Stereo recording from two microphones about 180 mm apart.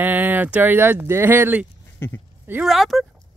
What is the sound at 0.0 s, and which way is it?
Speech, 10° right (ahead or behind).